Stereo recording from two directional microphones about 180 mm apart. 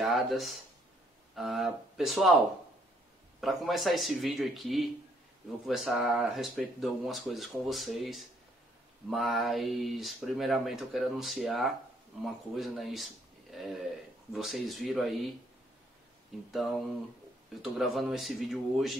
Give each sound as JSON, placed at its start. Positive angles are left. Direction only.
{"t": 0.0, "sound": "speech", "side_deg": 0}
{"t": 17.6, "sound": "speech", "side_deg": 0}